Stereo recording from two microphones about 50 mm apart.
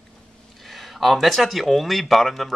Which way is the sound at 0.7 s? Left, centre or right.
Centre.